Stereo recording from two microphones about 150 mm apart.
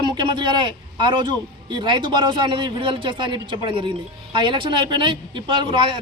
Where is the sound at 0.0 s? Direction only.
30° right (ahead or behind).